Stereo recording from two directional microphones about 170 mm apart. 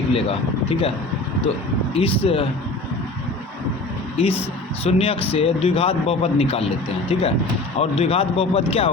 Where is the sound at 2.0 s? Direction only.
35° left (ahead or behind).